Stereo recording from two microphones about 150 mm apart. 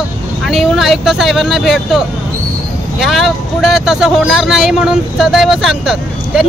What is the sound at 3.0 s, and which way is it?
Speech, centre (ahead or behind).